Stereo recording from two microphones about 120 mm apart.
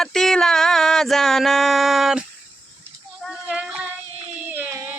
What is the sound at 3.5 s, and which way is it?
Child singing, 5° right (ahead or behind).